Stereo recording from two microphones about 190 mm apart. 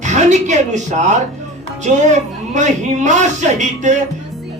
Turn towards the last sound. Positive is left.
turn(degrees=-40)  # may be behind; listen again after turning